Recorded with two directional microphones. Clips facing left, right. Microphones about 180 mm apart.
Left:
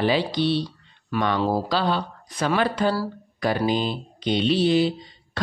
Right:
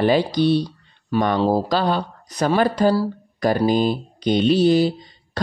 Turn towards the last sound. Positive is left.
turn(degrees=-40)  # may be behind; listen again after turning